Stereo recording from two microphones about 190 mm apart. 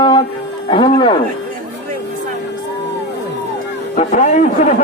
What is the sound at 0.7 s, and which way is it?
Speech, 25° left (ahead or behind).